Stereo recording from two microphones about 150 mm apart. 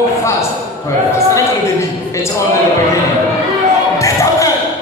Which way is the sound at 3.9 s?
20° left (ahead or behind).